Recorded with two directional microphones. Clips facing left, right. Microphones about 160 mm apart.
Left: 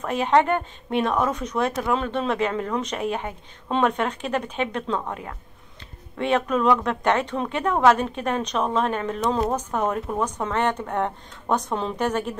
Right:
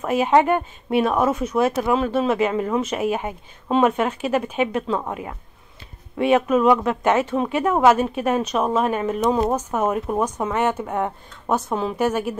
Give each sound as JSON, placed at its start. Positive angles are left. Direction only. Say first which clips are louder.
{"t": 0.0, "sound": "speech", "louder": "right 3 dB", "side_deg": -10}